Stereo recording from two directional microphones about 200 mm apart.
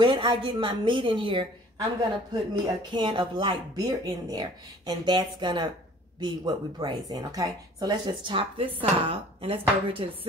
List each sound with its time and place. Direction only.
0.0 s speech: 25° right (ahead or behind)